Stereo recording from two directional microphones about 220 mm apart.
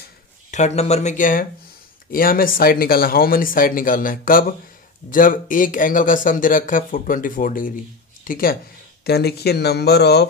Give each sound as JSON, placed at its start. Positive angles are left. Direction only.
{"t": 0.5, "sound": "speech", "side_deg": 30}